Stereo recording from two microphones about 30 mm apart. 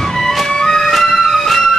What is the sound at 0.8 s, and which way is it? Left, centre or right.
Music, centre.